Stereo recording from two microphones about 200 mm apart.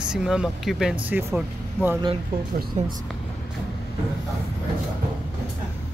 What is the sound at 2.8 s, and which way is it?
Speech, 35° right (ahead or behind).